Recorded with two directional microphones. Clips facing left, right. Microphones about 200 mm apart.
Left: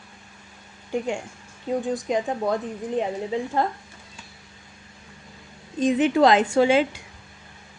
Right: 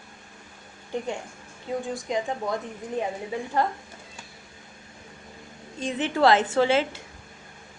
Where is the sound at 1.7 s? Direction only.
20° left (ahead or behind).